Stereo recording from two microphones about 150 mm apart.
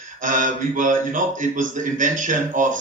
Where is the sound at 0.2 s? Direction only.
60° right (ahead or behind).